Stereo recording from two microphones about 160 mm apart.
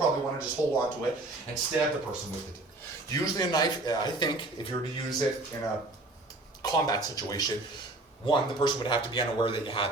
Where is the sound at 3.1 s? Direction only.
25° left (ahead or behind).